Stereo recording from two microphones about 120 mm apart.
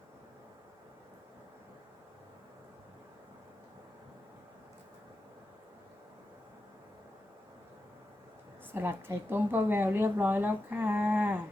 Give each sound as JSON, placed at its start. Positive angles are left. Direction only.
{"t": 8.7, "sound": "speech", "side_deg": -20}